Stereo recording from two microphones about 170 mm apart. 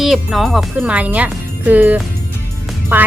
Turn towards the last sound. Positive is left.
turn(degrees=-10)  # may be behind; listen again after turning